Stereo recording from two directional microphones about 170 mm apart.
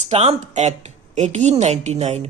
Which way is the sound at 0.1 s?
40° right (ahead or behind).